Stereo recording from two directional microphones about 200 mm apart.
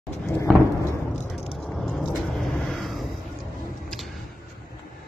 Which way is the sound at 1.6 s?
Centre (ahead or behind).